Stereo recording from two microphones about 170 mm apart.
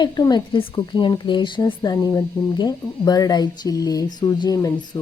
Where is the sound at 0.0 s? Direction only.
25° left (ahead or behind).